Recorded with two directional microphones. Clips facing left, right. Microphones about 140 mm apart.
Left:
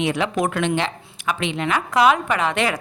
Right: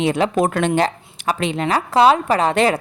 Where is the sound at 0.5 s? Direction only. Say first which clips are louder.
Right 4 dB; 40° right (ahead or behind).